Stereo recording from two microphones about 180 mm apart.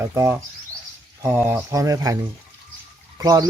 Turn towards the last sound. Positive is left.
turn(degrees=-20)  # may be behind; listen again after turning